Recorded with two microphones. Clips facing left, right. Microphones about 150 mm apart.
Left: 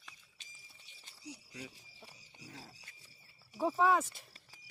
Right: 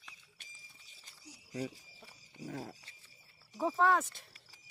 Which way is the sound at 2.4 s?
55° right (ahead or behind).